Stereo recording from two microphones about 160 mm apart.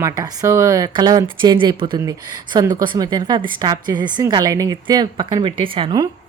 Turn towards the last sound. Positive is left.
turn(degrees=-30)  # may be behind; listen again after turning